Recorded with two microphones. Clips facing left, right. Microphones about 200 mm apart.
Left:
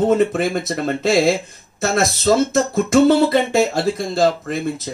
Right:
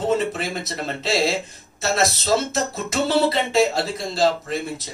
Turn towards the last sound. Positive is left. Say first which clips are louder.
# left 4 dB
turn(degrees=50)  # may be behind; listen again after turning